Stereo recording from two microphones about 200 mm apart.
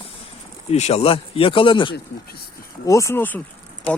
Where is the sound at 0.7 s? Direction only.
35° left (ahead or behind).